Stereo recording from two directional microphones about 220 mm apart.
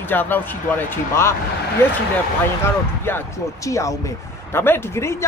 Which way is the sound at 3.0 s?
10° left (ahead or behind).